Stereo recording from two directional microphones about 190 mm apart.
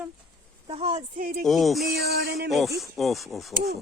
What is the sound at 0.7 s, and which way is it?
Speech, 30° right (ahead or behind).